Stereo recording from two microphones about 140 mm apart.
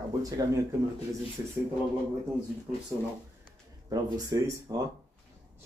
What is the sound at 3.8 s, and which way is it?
Speech, 25° right (ahead or behind).